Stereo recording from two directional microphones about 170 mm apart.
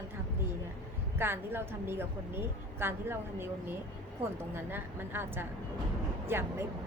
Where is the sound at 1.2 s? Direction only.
15° right (ahead or behind).